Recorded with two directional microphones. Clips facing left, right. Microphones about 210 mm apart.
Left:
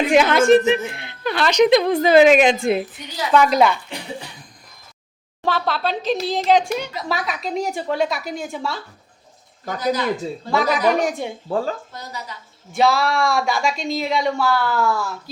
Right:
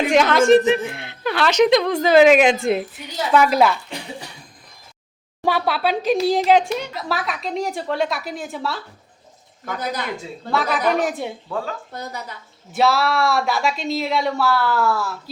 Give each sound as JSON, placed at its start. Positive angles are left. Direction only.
{"t": 0.1, "sound": "a woman's voice", "side_deg": 5}
{"t": 5.4, "sound": "a woman's voice", "side_deg": -10}
{"t": 10.5, "sound": "a woman's voice", "side_deg": 0}
{"t": 11.4, "sound": "speech", "side_deg": 35}
{"t": 11.9, "sound": "a woman's voice", "side_deg": -55}
{"t": 12.7, "sound": "a woman's voice", "side_deg": 0}